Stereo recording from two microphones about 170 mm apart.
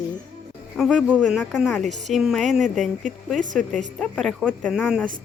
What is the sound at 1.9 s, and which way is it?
Speech, 45° right (ahead or behind).